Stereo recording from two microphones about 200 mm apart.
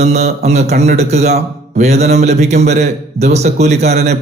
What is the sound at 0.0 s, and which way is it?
A man's voice, 35° right (ahead or behind).